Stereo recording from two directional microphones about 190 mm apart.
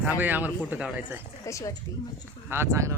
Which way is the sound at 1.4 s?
15° left (ahead or behind).